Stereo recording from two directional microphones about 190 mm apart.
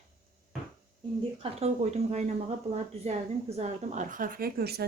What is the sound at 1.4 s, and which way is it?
A woman's voice, 35° right (ahead or behind).